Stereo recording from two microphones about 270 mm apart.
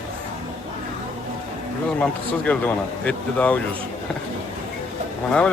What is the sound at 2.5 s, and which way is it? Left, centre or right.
Speech, centre.